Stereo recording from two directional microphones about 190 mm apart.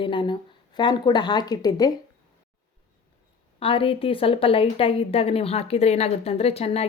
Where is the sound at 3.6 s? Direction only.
30° left (ahead or behind).